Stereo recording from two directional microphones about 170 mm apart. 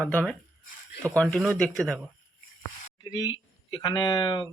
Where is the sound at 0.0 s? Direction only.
10° left (ahead or behind).